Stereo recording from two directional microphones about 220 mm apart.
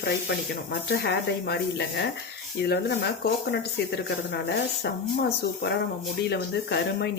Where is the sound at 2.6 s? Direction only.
45° left (ahead or behind).